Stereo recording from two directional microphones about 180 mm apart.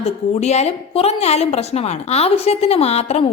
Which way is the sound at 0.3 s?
35° left (ahead or behind).